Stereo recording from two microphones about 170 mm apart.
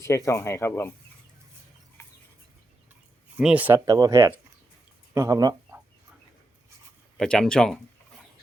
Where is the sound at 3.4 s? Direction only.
5° right (ahead or behind).